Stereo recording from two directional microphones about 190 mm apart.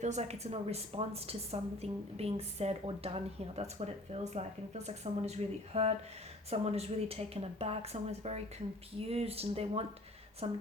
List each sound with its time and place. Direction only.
0.0 s a woman's voice: 35° right (ahead or behind)